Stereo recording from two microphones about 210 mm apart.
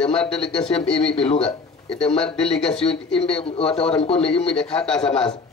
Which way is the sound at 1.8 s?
5° left (ahead or behind).